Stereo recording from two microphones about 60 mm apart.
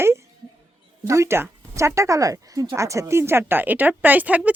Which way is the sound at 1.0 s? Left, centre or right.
Right.